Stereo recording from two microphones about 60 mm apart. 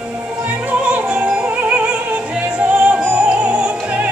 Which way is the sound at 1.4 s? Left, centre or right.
Right.